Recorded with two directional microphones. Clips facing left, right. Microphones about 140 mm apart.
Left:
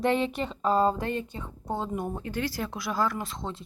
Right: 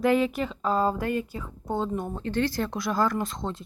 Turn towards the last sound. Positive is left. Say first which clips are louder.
# right 4 dB
turn(degrees=0)  # may be behind; listen again after turning